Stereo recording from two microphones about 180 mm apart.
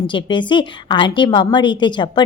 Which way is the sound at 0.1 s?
25° left (ahead or behind).